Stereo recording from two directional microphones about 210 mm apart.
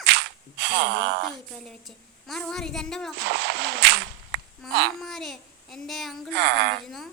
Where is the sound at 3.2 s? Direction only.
55° right (ahead or behind).